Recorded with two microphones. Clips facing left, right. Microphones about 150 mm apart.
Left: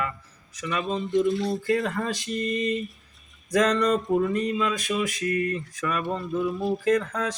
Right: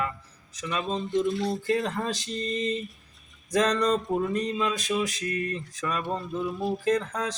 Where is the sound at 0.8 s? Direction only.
Centre (ahead or behind).